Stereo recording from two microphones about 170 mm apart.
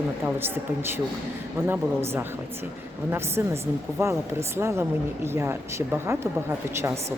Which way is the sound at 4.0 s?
15° right (ahead or behind).